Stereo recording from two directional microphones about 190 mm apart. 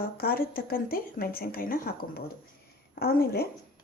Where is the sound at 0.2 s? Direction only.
50° left (ahead or behind).